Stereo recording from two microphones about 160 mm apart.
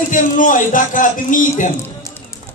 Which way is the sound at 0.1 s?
55° left (ahead or behind).